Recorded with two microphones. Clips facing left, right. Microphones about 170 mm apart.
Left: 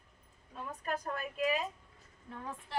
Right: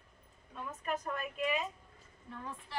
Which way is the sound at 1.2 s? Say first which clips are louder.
Left 2 dB; 35° left (ahead or behind).